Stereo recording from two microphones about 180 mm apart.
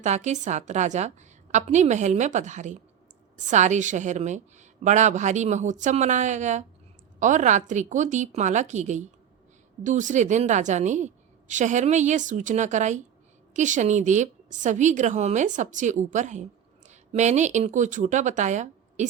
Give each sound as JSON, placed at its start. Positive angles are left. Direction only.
{"t": 0.0, "sound": "a woman's voice", "side_deg": -40}